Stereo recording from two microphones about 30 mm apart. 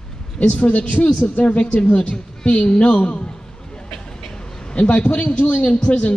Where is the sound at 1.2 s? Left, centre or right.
Left.